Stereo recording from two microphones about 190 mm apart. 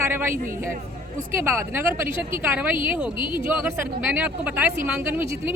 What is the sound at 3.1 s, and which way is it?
Speech, 25° left (ahead or behind).